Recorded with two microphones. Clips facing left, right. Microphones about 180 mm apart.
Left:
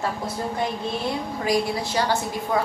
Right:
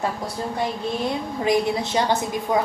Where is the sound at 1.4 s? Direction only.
20° right (ahead or behind).